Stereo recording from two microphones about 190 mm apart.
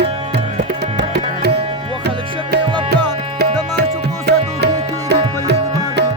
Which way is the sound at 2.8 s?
60° right (ahead or behind).